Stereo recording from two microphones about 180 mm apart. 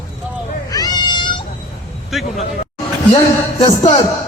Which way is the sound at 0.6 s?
20° left (ahead or behind).